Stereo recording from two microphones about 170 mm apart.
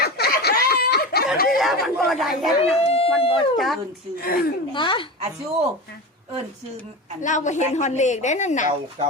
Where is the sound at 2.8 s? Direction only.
35° left (ahead or behind).